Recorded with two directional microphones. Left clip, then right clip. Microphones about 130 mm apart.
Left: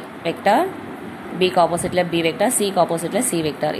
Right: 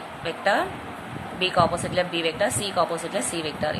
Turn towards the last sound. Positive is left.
turn(degrees=25)  # may be behind; listen again after turning